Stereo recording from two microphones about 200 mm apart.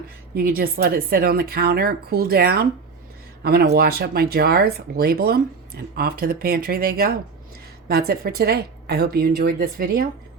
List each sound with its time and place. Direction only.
0.3 s speech: 50° right (ahead or behind)